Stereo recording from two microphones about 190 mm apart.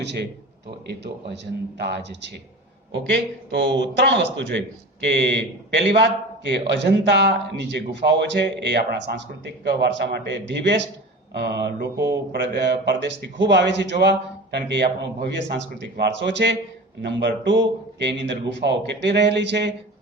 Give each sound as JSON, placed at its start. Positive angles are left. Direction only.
{"t": 0.0, "sound": "speech", "side_deg": -65}
{"t": 1.8, "sound": "speech", "side_deg": -65}